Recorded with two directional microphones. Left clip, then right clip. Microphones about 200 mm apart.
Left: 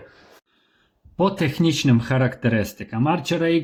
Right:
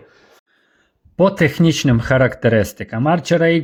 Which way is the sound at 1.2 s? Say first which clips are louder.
Right 7 dB; 30° right (ahead or behind).